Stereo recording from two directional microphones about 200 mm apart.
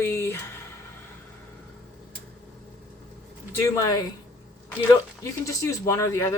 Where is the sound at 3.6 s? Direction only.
15° left (ahead or behind).